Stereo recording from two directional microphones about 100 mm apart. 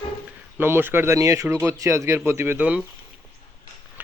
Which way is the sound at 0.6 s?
20° right (ahead or behind).